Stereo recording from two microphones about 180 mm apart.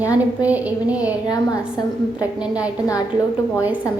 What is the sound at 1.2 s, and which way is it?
Speech, 20° left (ahead or behind).